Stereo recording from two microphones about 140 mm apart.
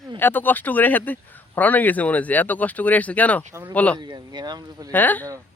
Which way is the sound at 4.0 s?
30° right (ahead or behind).